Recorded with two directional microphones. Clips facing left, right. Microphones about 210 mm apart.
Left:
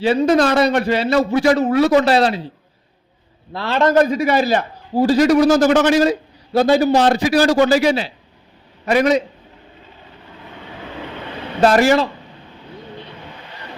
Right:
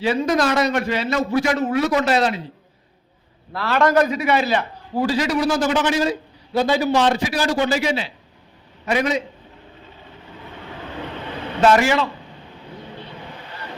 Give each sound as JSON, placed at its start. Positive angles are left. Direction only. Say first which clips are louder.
{"t": 0.0, "sound": "a man's voice", "louder": "left 5 dB", "side_deg": 30}
{"t": 3.5, "sound": "a man's voice", "louder": "left 2 dB", "side_deg": 25}
{"t": 4.1, "sound": "a man's voice", "louder": "left 3 dB", "side_deg": 40}
{"t": 11.6, "sound": "a man's voice", "louder": "left 3 dB", "side_deg": 40}